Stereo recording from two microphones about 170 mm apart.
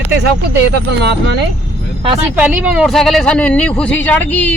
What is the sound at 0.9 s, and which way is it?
Speech, 80° right.